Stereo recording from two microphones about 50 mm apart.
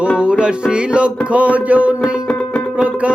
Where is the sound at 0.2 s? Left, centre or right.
Right.